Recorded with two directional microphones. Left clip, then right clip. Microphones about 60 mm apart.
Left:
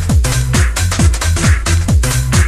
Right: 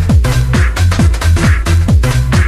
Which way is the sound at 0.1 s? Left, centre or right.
Left.